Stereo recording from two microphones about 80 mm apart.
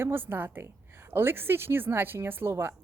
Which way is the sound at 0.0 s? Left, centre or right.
Right.